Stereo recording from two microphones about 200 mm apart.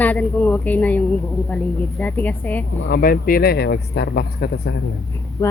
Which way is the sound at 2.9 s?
45° left (ahead or behind).